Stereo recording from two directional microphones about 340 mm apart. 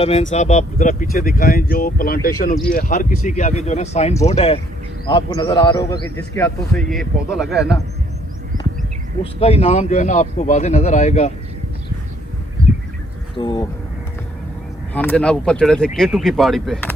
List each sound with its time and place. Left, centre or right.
0.0 s a man's voice: centre
9.2 s speech: centre
13.3 s a man's voice: centre
14.9 s speech: centre